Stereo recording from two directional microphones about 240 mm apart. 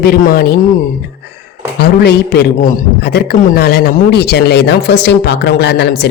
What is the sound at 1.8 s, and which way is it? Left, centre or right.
A man's voice, left.